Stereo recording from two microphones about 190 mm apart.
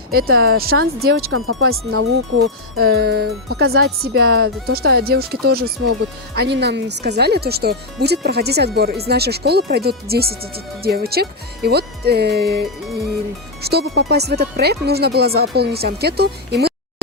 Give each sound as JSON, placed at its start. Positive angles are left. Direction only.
{"t": 0.1, "sound": "speech", "side_deg": -55}
{"t": 1.3, "sound": "speech", "side_deg": -90}
{"t": 2.7, "sound": "speech", "side_deg": -55}